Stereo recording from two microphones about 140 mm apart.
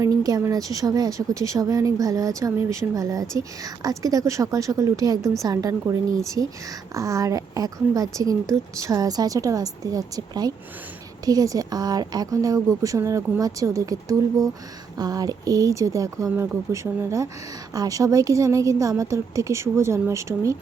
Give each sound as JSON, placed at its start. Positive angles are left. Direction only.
{"t": 0.0, "sound": "speech", "side_deg": -25}